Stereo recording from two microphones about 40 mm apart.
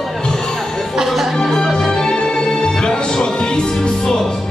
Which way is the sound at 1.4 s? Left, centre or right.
Centre.